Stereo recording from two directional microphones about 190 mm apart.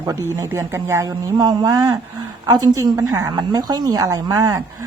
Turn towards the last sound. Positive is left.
turn(degrees=-15)  # may be behind; listen again after turning